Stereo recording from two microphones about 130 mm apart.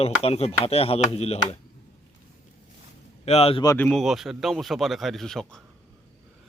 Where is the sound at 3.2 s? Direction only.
55° left (ahead or behind).